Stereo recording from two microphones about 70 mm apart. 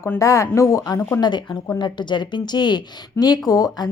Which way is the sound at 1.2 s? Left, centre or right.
Left.